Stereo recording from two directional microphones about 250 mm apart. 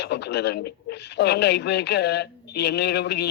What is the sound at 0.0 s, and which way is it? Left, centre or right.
A man's voice, left.